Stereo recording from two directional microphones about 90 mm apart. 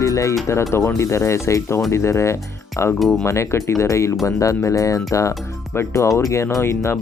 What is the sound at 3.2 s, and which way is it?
Speech, 30° left (ahead or behind).